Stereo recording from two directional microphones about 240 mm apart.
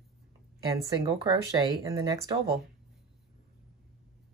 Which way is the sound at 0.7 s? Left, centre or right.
Centre.